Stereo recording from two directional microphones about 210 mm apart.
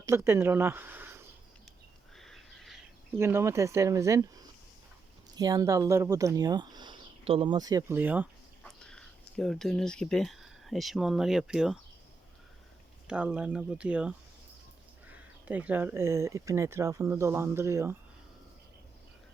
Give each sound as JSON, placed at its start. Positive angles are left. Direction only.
{"t": 0.0, "sound": "speech", "side_deg": -15}
{"t": 2.1, "sound": "a sound", "side_deg": 0}
{"t": 3.2, "sound": "speech", "side_deg": -10}
{"t": 5.4, "sound": "speech", "side_deg": -15}
{"t": 8.8, "sound": "speech", "side_deg": 5}
{"t": 13.1, "sound": "speech", "side_deg": -5}